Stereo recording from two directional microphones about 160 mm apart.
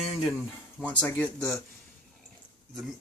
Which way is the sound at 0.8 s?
10° left (ahead or behind).